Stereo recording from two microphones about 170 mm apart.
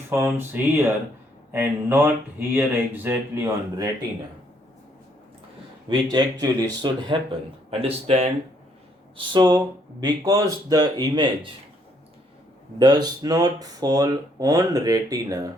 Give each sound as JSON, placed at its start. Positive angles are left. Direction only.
{"t": 0.1, "sound": "speech", "side_deg": -15}
{"t": 5.9, "sound": "speech", "side_deg": -25}
{"t": 12.8, "sound": "speech", "side_deg": -25}